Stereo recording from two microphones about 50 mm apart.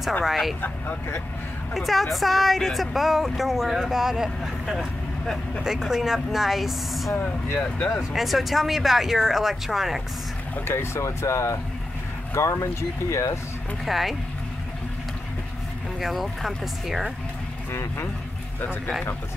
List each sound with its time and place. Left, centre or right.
0.2 s speech: centre
0.6 s speech: left
1.7 s speech: centre
8.1 s speech: centre
10.7 s speech: left
12.4 s speech: left
13.8 s speech: centre
16.0 s speech: centre